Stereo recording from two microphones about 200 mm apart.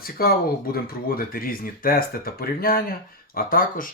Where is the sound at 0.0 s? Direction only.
50° left (ahead or behind).